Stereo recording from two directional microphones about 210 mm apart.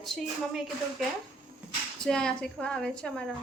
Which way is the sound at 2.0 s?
5° left (ahead or behind).